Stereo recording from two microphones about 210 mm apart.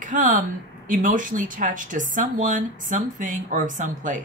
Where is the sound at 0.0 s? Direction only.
40° right (ahead or behind).